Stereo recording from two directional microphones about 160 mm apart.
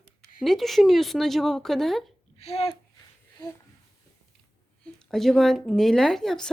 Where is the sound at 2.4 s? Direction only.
40° left (ahead or behind).